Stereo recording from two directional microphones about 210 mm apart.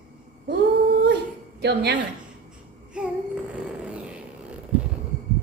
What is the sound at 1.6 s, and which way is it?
Speech, 50° right (ahead or behind).